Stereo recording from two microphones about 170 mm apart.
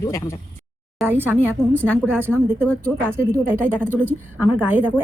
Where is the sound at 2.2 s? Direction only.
10° left (ahead or behind).